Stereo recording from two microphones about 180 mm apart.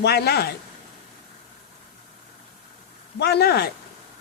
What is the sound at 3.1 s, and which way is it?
Speech, 65° left (ahead or behind).